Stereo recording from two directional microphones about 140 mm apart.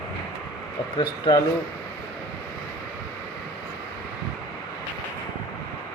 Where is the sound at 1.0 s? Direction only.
30° left (ahead or behind).